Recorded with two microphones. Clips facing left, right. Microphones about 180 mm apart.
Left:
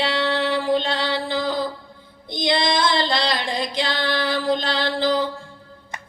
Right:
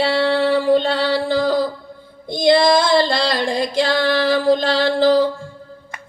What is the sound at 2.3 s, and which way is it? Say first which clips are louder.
Female singing: right 8 dB; 45° right (ahead or behind).